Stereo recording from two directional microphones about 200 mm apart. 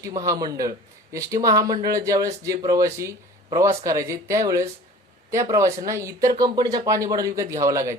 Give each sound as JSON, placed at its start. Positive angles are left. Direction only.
{"t": 0.0, "sound": "speech", "side_deg": -15}